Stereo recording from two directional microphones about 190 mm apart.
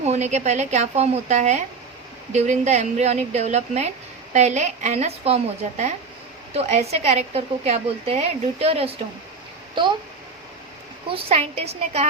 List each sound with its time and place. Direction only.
0.0 s a woman's voice: 35° right (ahead or behind)
11.1 s a woman's voice: 30° right (ahead or behind)